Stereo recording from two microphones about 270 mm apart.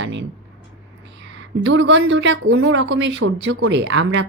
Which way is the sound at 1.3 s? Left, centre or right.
Right.